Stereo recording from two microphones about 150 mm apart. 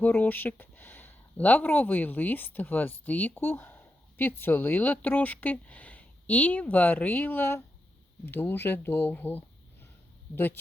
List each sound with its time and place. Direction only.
0.0 s speech: 10° left (ahead or behind)